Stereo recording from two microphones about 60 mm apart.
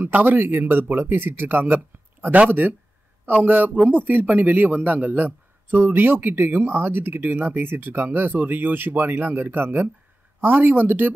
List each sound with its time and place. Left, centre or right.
0.0 s a man's voice: right
3.4 s a man's voice: right